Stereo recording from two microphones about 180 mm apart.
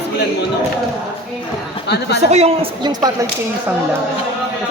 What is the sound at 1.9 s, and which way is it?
Speech, 65° left (ahead or behind).